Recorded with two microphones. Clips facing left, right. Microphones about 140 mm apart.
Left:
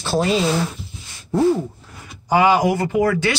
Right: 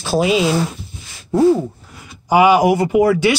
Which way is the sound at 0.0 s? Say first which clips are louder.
Right 3 dB; 10° right (ahead or behind).